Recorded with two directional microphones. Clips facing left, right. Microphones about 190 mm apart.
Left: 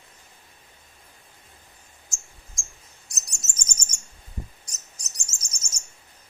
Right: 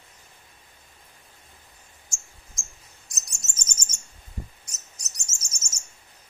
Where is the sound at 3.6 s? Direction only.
10° left (ahead or behind).